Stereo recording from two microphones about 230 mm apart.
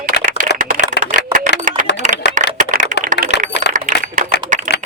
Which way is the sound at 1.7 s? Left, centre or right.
Right.